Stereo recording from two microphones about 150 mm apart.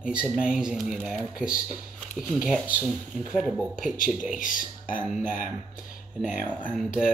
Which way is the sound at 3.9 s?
65° left (ahead or behind).